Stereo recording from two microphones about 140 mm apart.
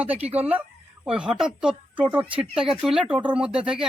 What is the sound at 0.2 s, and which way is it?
Speech, 45° right (ahead or behind).